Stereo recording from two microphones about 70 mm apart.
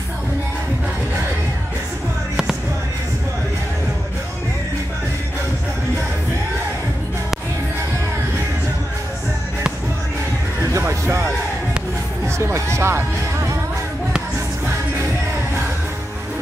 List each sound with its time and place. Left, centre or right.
10.9 s music: right
12.7 s music: right